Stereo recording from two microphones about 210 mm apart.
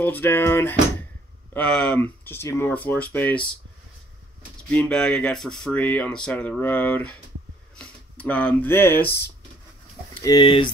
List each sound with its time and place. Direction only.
0.0 s speech: 10° left (ahead or behind)
4.6 s speech: 5° left (ahead or behind)
10.1 s speech: 20° left (ahead or behind)